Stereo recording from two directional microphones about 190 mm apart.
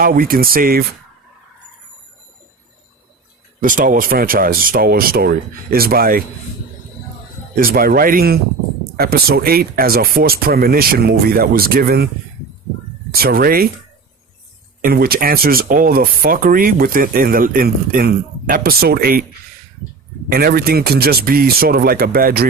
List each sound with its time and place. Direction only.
0.0 s speech: 50° right (ahead or behind)
3.6 s speech: 45° right (ahead or behind)
7.5 s speech: 50° right (ahead or behind)
13.1 s speech: 50° right (ahead or behind)
14.8 s speech: 50° right (ahead or behind)
20.3 s speech: 55° right (ahead or behind)